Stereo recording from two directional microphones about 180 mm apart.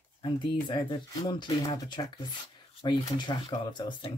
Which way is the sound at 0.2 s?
25° left (ahead or behind).